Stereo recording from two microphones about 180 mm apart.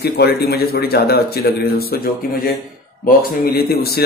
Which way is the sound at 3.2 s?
60° left (ahead or behind).